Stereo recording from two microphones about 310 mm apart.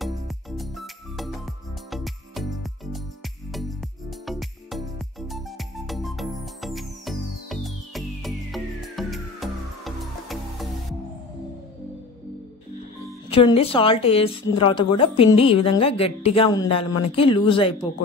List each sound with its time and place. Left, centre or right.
0.0 s music: centre
4.3 s music: centre
13.3 s a woman's voice: centre